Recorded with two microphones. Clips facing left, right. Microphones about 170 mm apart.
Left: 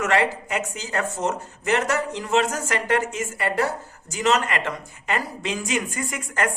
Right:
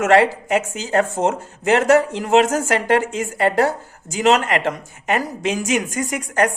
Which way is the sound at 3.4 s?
90° right.